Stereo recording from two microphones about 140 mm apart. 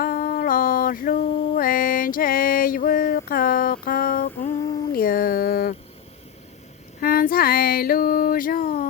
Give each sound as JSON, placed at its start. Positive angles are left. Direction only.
{"t": 0.0, "sound": "mantra", "side_deg": 90}
{"t": 4.9, "sound": "a sound", "side_deg": 90}
{"t": 7.0, "sound": "female singing", "side_deg": 90}